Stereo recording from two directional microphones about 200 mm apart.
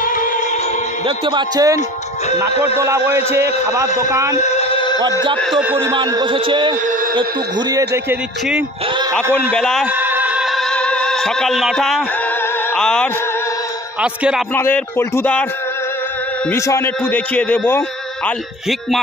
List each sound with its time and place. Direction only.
0.0 s music: 45° left (ahead or behind)
1.0 s a man's voice: 25° right (ahead or behind)
2.8 s music: 15° right (ahead or behind)
4.4 s a sound: 35° left (ahead or behind)
5.4 s music: 5° right (ahead or behind)
5.9 s a man's voice: 20° right (ahead or behind)
7.9 s music: 10° right (ahead or behind)
9.5 s a man's voice: 5° left (ahead or behind)
9.8 s music: 10° right (ahead or behind)
14.0 s a man's voice: 5° right (ahead or behind)
14.5 s a man's voice: 10° left (ahead or behind)
16.4 s a man's voice: 15° left (ahead or behind)